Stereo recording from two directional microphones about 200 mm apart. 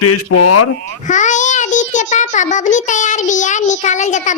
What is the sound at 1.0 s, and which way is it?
A child's voice, 40° left (ahead or behind).